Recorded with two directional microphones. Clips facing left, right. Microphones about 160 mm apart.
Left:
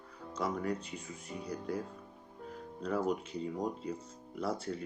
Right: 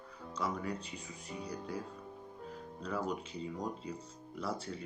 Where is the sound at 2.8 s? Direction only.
55° left (ahead or behind).